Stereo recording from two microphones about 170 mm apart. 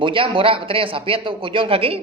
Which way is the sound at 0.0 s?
30° right (ahead or behind).